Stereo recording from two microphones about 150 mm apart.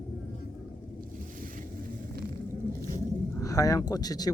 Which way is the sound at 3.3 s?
20° left (ahead or behind).